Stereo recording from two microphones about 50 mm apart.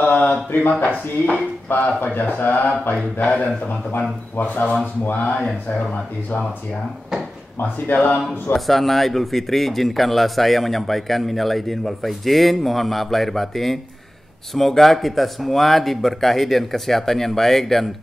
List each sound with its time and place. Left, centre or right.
0.1 s a sound: left
0.5 s speech: left
7.5 s speech: left
8.5 s speech: centre